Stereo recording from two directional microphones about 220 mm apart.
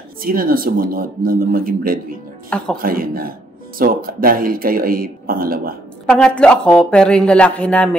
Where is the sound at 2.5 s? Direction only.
5° left (ahead or behind).